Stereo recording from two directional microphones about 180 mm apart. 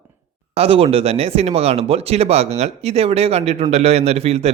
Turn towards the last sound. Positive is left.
turn(degrees=-35)  # may be behind; listen again after turning